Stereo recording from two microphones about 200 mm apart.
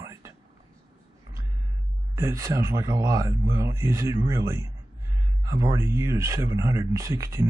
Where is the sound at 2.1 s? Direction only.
15° right (ahead or behind).